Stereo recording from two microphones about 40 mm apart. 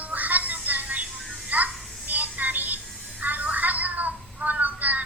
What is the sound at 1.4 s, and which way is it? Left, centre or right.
Music, right.